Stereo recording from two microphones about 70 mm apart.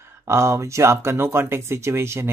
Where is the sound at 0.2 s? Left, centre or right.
Right.